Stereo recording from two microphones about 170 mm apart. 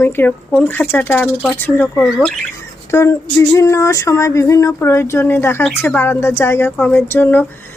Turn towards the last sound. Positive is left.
turn(degrees=10)  # may be behind; listen again after turning